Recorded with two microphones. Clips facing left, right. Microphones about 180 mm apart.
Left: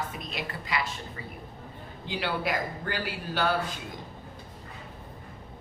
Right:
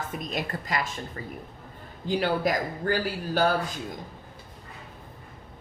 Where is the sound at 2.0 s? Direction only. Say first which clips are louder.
Right 6 dB; 45° right (ahead or behind).